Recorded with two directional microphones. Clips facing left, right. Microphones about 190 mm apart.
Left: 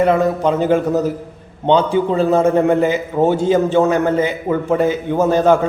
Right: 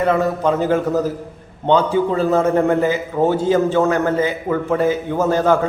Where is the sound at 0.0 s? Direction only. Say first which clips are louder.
Left 3 dB; 20° left (ahead or behind).